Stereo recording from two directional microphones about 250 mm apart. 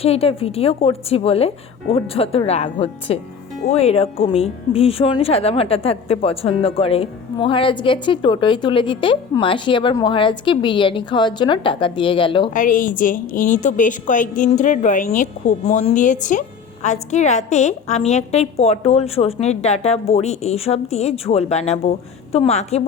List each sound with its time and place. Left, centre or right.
0.0 s speech: left
12.5 s a woman's voice: left